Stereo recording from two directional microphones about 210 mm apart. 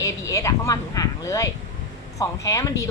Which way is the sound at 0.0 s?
15° left (ahead or behind).